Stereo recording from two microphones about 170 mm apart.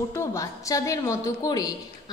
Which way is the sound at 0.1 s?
15° left (ahead or behind).